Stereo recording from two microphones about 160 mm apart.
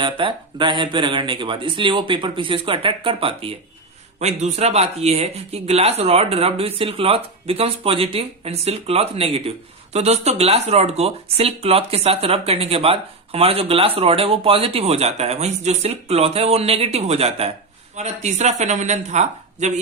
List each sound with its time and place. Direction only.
0.0 s speech: 30° right (ahead or behind)